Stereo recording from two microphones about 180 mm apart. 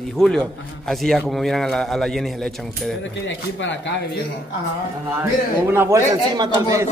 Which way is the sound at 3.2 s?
90° left.